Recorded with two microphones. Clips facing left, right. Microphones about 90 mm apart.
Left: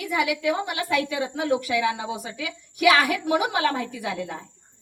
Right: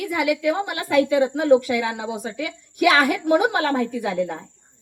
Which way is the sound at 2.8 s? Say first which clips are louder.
Right 2 dB; 20° right (ahead or behind).